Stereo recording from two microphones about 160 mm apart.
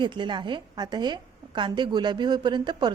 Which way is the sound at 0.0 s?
30° right (ahead or behind).